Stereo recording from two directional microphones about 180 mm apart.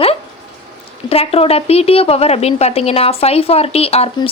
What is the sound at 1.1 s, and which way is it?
Speech, 35° left (ahead or behind).